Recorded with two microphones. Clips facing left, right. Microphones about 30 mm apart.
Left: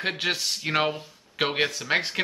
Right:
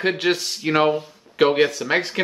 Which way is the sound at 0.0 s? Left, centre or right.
Centre.